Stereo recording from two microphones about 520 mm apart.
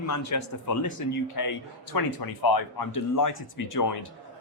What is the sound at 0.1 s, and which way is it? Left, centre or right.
Speech, left.